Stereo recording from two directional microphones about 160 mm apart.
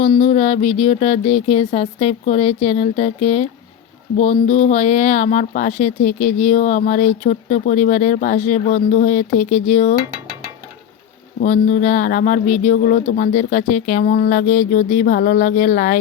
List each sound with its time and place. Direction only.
0.1 s a sound: 40° left (ahead or behind)
4.2 s speech: 40° left (ahead or behind)
11.4 s speech: 50° left (ahead or behind)